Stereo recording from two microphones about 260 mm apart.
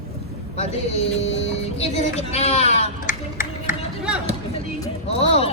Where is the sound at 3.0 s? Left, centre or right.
Left.